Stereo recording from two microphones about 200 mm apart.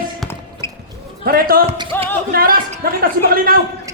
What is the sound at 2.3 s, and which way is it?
Speech, 45° right (ahead or behind).